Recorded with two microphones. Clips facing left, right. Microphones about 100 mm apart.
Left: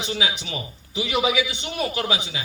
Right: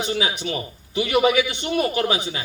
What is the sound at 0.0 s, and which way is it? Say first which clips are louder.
A man's voice: right 3 dB; 45° right (ahead or behind).